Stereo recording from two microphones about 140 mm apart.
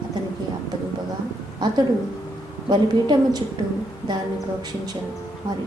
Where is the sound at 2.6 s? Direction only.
30° right (ahead or behind).